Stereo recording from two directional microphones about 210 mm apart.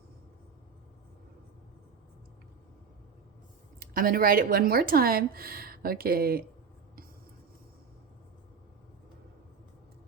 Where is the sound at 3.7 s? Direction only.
45° right (ahead or behind).